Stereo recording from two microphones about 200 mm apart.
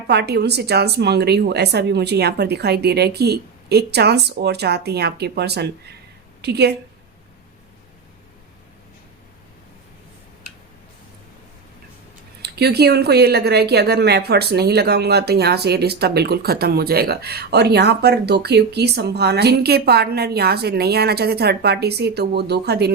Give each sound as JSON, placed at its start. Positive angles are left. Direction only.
{"t": 0.1, "sound": "a woman's voice", "side_deg": -55}
{"t": 12.4, "sound": "speech", "side_deg": -55}